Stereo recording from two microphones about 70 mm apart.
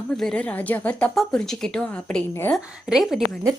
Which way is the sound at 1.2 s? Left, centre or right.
Centre.